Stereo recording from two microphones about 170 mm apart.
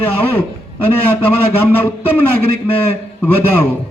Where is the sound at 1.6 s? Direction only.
10° left (ahead or behind).